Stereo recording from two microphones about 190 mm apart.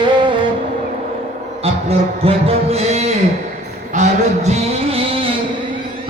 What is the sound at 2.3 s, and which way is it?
Music, 30° right (ahead or behind).